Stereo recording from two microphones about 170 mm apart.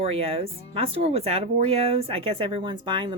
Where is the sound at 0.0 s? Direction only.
35° right (ahead or behind).